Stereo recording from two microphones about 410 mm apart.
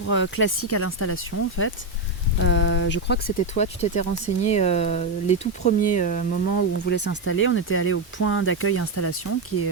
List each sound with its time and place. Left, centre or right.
0.1 s speech: left